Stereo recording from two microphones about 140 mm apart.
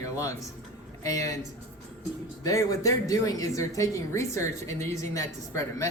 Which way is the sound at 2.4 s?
25° left (ahead or behind).